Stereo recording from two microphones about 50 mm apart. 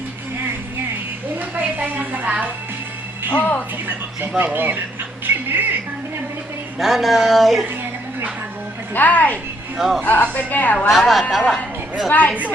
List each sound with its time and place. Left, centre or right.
1.4 s a sound: right
3.2 s music: left
3.8 s speech: right
5.2 s a sound: right
6.7 s speech: centre
9.0 s a woman's voice: left
9.7 s speech: centre
10.0 s a woman's voice: left
10.8 s speech: centre